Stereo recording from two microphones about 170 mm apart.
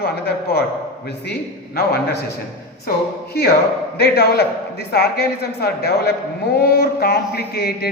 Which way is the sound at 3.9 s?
70° left (ahead or behind).